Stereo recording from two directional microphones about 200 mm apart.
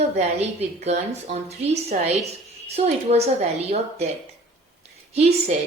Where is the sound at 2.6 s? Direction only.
30° right (ahead or behind).